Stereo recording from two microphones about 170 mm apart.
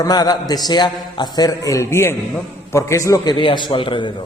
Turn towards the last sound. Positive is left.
turn(degrees=30)  # may be behind; listen again after turning